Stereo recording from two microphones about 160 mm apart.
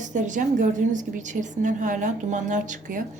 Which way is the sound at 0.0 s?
50° right (ahead or behind).